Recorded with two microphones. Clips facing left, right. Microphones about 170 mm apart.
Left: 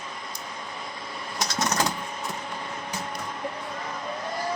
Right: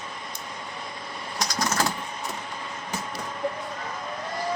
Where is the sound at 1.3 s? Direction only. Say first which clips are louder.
Even; 20° left (ahead or behind).